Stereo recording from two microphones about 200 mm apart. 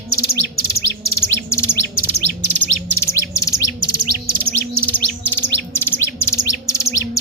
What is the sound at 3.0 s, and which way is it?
Bird, 15° left (ahead or behind).